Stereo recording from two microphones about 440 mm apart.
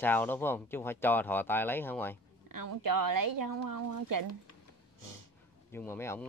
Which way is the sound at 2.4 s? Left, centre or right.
Right.